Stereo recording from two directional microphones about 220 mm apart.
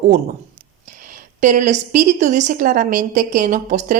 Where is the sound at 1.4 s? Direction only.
35° right (ahead or behind).